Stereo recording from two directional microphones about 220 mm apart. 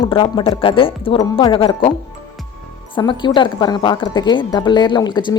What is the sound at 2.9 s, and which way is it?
A woman's voice, 20° left (ahead or behind).